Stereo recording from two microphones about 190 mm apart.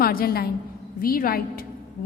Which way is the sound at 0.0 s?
50° left (ahead or behind).